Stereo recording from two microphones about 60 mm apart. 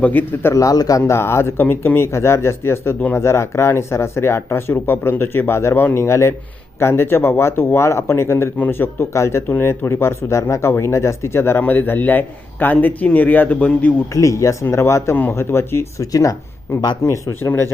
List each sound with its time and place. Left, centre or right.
0.0 s a man's voice: left
0.5 s a man's voice: left
1.1 s speech: left
1.5 s speech: left
2.1 s speech: left
8.5 s a man's voice: left
9.0 s speech: left
11.6 s a man's voice: left
14.1 s speech: left
14.6 s speech: left
16.0 s speech: left